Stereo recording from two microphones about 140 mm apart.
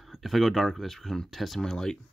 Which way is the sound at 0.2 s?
Centre (ahead or behind).